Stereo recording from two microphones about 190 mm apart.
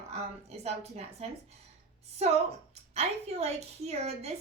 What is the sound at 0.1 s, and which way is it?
Speech, 35° right (ahead or behind).